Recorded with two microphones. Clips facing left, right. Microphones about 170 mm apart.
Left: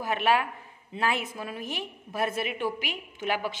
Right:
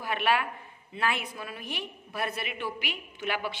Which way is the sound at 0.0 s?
40° left (ahead or behind).